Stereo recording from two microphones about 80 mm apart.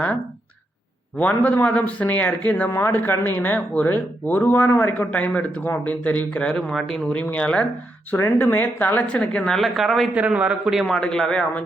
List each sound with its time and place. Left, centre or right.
1.2 s speech: left
2.6 s speech: left
2.9 s speech: left
8.1 s speech: left; by 9.6 s centre
9.6 s speech: centre
10.2 s speech: centre
10.8 s speech: centre